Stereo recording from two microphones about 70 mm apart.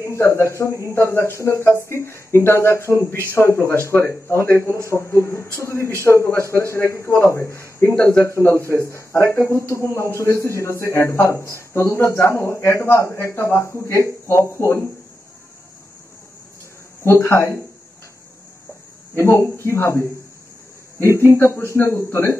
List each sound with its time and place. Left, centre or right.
0.0 s speech: left
17.0 s speech: left
19.1 s speech: left
21.3 s speech: left